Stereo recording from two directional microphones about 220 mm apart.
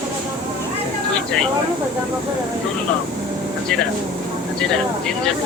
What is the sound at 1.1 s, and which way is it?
Speech, 5° left (ahead or behind).